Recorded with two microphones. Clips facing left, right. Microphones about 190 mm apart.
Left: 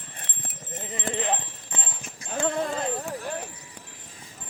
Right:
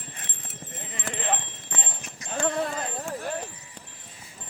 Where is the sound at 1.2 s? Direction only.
15° left (ahead or behind).